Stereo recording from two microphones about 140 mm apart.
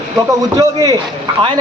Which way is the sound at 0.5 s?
25° right (ahead or behind).